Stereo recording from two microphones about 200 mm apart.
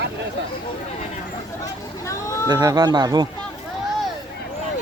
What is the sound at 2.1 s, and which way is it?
Speech, 15° left (ahead or behind).